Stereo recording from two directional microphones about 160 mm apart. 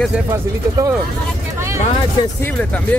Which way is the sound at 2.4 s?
10° left (ahead or behind).